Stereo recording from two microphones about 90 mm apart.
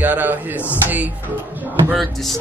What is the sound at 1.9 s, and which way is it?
Speech, centre (ahead or behind).